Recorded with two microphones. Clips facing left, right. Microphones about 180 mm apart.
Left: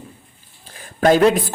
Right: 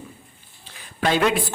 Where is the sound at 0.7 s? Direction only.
45° left (ahead or behind).